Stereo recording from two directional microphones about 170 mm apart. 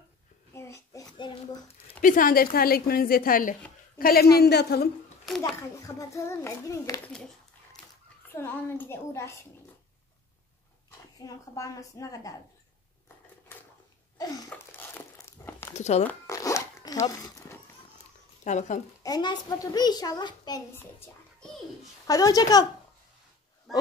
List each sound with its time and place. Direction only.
0.5 s a sound: 15° left (ahead or behind)
1.2 s a child's voice: 30° left (ahead or behind)
2.0 s a woman's voice: 55° left (ahead or behind); by 4.8 s 75° left (ahead or behind)
5.6 s a child's voice: 15° left (ahead or behind)
8.3 s a child's voice: 15° left (ahead or behind)
11.2 s a child's voice: 20° left (ahead or behind)
14.1 s a sound: 20° left (ahead or behind)
15.7 s speech: 40° left (ahead or behind)
16.3 s zipper: 20° left (ahead or behind)
18.4 s speech: 45° left (ahead or behind)
19.0 s a child's voice: 25° left (ahead or behind)
22.0 s a child's voice: 20° left (ahead or behind)
23.7 s speech: centre (ahead or behind)